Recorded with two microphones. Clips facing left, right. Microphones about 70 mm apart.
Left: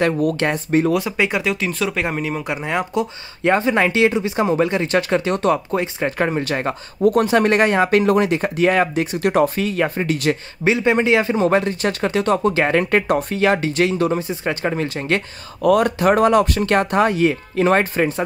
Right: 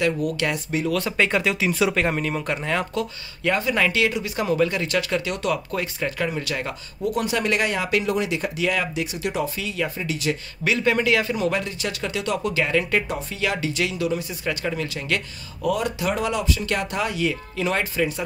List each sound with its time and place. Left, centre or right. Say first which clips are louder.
0.0 s speech: left 5 dB; left
0.9 s speech: left 2 dB; centre
2.0 s speech: left 1 dB; centre
3.4 s speech: left 5 dB; left
6.1 s speech: left 8 dB; left
10.6 s speech: left 4 dB; left
15.6 s speech: left 9 dB; left